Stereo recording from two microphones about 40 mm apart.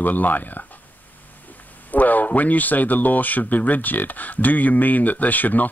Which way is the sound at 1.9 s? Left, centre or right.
Left.